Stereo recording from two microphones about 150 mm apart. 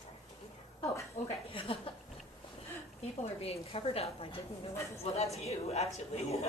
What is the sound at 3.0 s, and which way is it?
A woman's voice, 40° left (ahead or behind).